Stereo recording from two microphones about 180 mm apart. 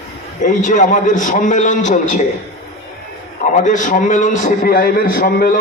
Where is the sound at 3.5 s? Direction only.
45° left (ahead or behind).